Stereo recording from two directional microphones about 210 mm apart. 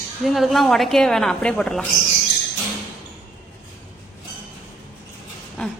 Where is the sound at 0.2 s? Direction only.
Centre (ahead or behind).